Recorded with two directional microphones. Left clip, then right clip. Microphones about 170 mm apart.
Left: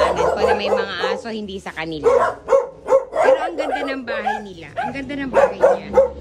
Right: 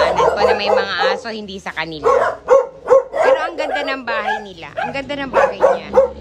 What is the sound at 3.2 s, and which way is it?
Dog, centre (ahead or behind).